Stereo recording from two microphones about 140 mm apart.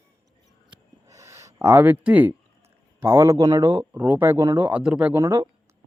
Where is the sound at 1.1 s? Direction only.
20° right (ahead or behind).